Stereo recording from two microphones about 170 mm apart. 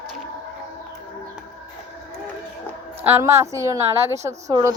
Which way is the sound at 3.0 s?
15° right (ahead or behind).